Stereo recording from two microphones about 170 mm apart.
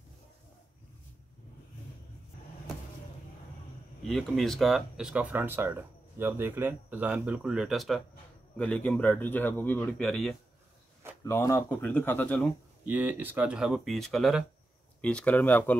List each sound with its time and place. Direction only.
4.1 s speech: centre (ahead or behind)
11.2 s speech: 15° left (ahead or behind)
12.8 s speech: 10° right (ahead or behind); by 15.7 s 10° left (ahead or behind)